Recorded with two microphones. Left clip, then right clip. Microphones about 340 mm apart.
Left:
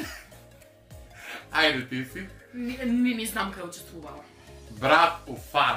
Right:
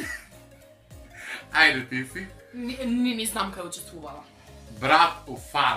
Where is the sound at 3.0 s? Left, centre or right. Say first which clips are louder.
Right 1 dB; centre.